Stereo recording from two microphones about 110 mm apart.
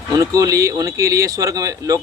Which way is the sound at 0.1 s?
30° right (ahead or behind).